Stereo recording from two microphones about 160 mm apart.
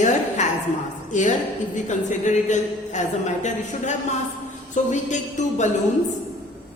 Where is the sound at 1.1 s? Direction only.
50° left (ahead or behind).